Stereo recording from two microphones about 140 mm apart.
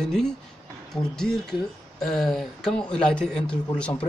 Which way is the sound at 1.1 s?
5° left (ahead or behind).